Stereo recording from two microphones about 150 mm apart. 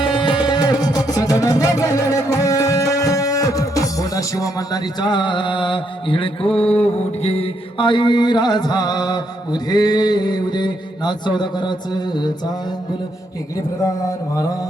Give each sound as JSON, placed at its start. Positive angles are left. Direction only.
{"t": 0.2, "sound": "music", "side_deg": 30}
{"t": 14.3, "sound": "music", "side_deg": 25}